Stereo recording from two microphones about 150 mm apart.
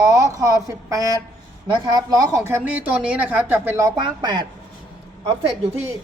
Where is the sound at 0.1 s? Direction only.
25° right (ahead or behind).